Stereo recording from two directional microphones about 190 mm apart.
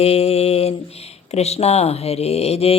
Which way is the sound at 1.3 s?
35° left (ahead or behind).